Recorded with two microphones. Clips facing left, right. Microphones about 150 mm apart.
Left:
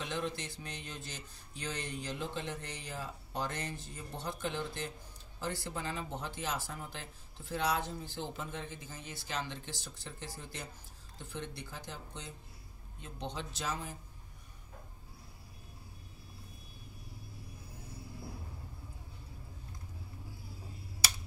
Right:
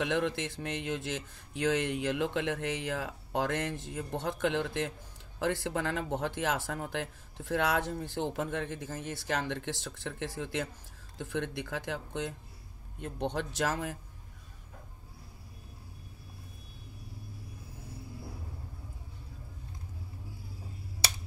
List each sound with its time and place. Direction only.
0.0 s speech: 70° right (ahead or behind)
13.0 s speech: 65° right (ahead or behind)